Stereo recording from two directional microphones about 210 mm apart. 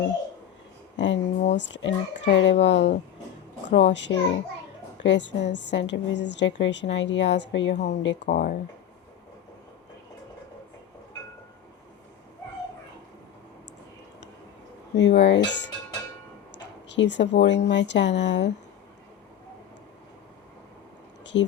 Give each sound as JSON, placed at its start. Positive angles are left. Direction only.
{"t": 0.9, "sound": "a woman's voice", "side_deg": 60}
{"t": 14.9, "sound": "a woman's voice", "side_deg": 55}
{"t": 16.9, "sound": "a woman's voice", "side_deg": 55}
{"t": 21.3, "sound": "a woman's voice", "side_deg": 60}